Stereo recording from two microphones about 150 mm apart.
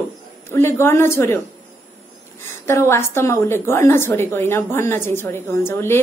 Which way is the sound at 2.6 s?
15° left (ahead or behind).